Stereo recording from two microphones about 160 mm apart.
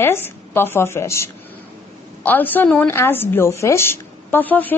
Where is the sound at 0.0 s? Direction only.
15° left (ahead or behind).